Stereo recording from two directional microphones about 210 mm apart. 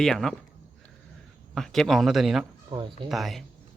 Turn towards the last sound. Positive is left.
turn(degrees=0)  # may be behind; listen again after turning